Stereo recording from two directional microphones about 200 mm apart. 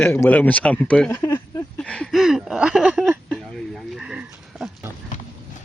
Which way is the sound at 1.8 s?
5° left (ahead or behind).